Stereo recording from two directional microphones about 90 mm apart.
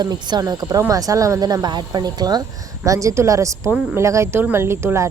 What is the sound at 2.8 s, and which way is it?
A woman's voice, 35° right (ahead or behind).